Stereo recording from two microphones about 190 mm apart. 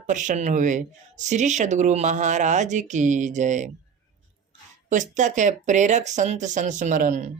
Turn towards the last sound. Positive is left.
turn(degrees=-40)  # may be behind; listen again after turning